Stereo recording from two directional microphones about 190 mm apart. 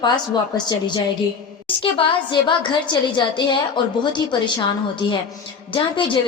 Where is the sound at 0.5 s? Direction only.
20° left (ahead or behind).